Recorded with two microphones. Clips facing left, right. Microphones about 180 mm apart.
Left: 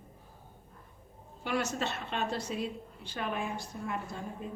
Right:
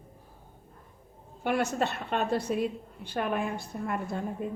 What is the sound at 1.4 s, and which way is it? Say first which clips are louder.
A woman's voice: right 5 dB; 55° right (ahead or behind).